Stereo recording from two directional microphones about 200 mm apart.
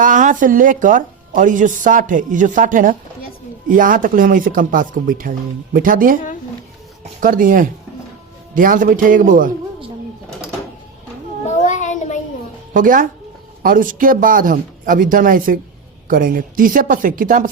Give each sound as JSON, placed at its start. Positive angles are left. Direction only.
{"t": 0.0, "sound": "a woman's voice", "side_deg": -40}
{"t": 11.4, "sound": "child singing", "side_deg": 35}
{"t": 12.7, "sound": "speech", "side_deg": -40}